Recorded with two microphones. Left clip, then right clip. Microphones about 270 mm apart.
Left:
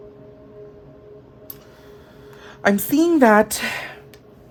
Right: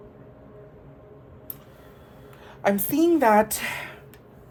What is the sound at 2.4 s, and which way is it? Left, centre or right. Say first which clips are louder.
A woman's voice: left 4 dB; left.